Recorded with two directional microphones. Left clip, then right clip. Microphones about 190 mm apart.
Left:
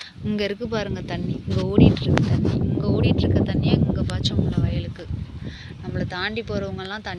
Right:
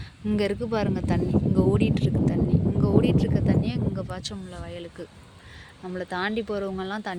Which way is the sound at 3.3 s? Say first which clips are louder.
Left 4 dB; 10° right (ahead or behind).